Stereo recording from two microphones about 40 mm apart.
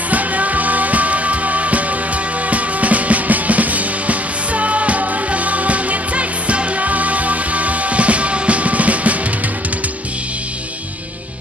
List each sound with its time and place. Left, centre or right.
0.1 s music: right